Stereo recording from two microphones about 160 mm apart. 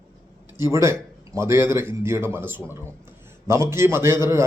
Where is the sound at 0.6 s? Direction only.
15° right (ahead or behind).